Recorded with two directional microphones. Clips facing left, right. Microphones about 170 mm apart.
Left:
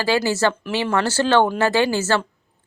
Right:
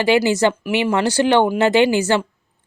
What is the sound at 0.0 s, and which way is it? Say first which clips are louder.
Speech: right 4 dB; 20° right (ahead or behind).